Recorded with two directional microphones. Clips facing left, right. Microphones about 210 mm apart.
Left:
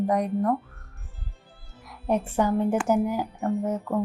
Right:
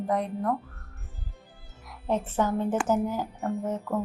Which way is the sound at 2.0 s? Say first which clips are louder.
Left 3 dB; 10° left (ahead or behind).